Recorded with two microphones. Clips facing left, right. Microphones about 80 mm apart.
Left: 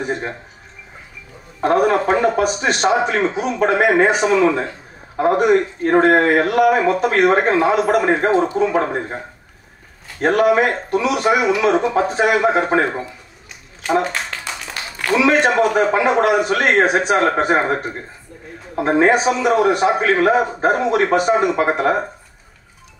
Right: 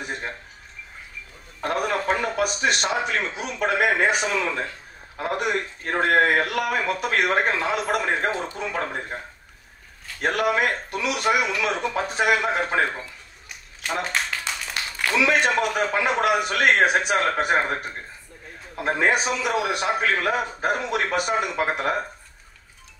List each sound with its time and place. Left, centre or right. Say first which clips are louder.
0.0 s speech: left 8 dB; left
1.6 s a man's voice: left 10 dB; left
10.2 s a man's voice: left 8 dB; left
15.2 s a man's voice: left 7 dB; left